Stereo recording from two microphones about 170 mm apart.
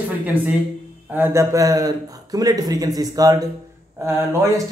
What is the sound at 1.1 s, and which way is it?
A man's voice, 15° right (ahead or behind).